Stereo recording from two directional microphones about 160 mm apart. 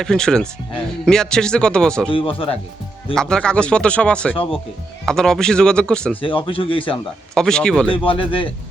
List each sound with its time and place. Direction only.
0.0 s speech: 5° left (ahead or behind)
2.0 s speech: 35° left (ahead or behind)
3.2 s speech: 5° left (ahead or behind)
6.2 s speech: 35° left (ahead or behind)
7.3 s speech: 5° left (ahead or behind)
7.9 s speech: 35° left (ahead or behind)